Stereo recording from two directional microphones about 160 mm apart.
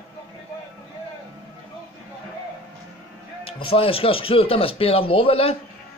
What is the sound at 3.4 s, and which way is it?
Speech, 35° left (ahead or behind).